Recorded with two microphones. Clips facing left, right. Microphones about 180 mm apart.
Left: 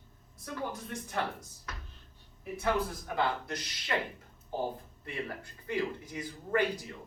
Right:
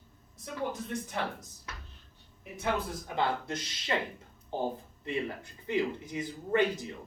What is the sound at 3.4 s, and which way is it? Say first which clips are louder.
Speech: right 3 dB; 25° right (ahead or behind).